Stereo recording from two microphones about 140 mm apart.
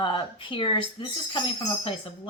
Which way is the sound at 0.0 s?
35° left (ahead or behind).